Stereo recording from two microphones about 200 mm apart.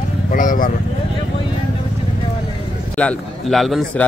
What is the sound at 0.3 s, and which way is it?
Speech, 40° left (ahead or behind).